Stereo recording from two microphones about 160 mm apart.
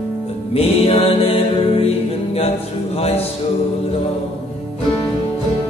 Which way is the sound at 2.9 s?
40° left (ahead or behind).